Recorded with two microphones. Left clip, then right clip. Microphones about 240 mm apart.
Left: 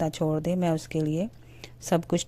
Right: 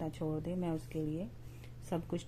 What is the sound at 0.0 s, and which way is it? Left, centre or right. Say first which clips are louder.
Speech: left 12 dB; left.